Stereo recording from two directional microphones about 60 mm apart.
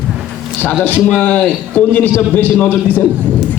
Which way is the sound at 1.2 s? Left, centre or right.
Left.